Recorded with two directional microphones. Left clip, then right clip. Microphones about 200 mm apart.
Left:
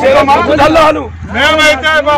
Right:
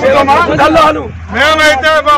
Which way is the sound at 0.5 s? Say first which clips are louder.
Left 1 dB; 45° left (ahead or behind).